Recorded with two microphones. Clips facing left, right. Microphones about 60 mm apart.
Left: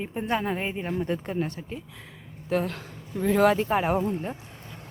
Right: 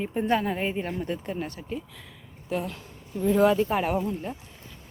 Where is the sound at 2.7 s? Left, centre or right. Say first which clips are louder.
Left 2 dB; left.